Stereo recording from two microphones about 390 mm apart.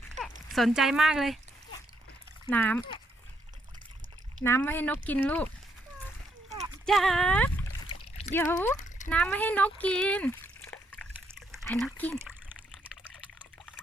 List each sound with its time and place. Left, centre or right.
0.5 s speech: centre
2.5 s speech: centre
4.4 s speech: centre
6.8 s speech: centre
8.7 s a sound: centre
9.0 s a sound: centre